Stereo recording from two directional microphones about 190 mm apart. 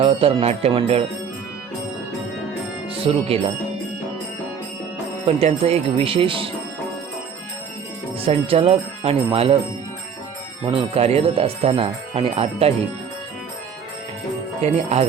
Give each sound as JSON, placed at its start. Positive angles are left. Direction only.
{"t": 0.0, "sound": "speech", "side_deg": -30}
{"t": 2.9, "sound": "speech", "side_deg": -30}
{"t": 5.4, "sound": "speech", "side_deg": -35}
{"t": 8.2, "sound": "speech", "side_deg": -30}
{"t": 10.6, "sound": "speech", "side_deg": -30}
{"t": 14.6, "sound": "speech", "side_deg": -30}